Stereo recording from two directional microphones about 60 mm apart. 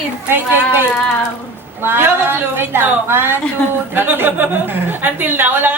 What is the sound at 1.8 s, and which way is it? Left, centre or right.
Speech, right.